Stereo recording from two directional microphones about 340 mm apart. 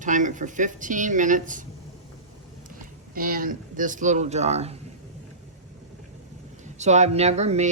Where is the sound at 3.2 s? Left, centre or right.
Right.